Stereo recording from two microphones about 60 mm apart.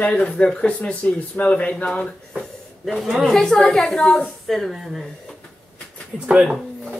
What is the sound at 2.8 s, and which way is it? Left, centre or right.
A woman's voice, centre.